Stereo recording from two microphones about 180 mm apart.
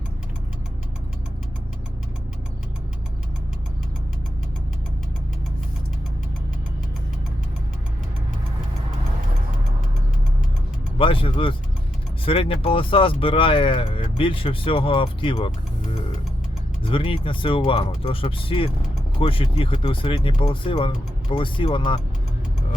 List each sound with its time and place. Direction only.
10.9 s speech: 30° left (ahead or behind)